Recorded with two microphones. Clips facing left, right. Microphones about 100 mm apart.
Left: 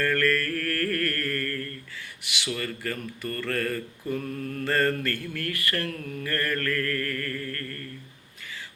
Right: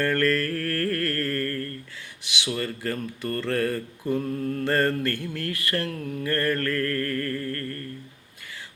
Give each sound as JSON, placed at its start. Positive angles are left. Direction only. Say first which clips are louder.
{"t": 0.0, "sound": "music", "louder": "right 2 dB", "side_deg": -25}
{"t": 2.5, "sound": "mantra", "louder": "right 3 dB", "side_deg": -25}